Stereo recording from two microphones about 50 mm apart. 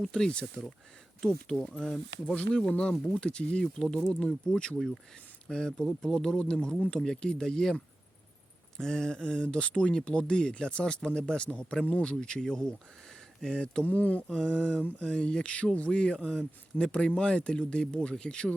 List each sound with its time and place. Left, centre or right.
0.1 s speech: centre
8.8 s speech: centre
13.8 s speech: left